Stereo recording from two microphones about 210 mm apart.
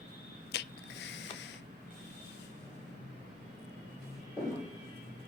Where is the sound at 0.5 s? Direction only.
50° left (ahead or behind).